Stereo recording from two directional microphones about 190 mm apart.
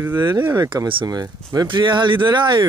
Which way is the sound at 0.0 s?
10° right (ahead or behind).